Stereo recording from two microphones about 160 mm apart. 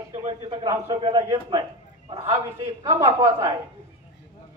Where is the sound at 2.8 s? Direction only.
20° right (ahead or behind).